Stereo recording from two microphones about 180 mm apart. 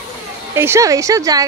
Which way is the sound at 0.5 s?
15° right (ahead or behind).